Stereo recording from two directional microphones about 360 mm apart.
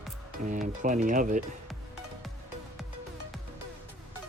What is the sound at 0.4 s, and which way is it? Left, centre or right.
Speech, right.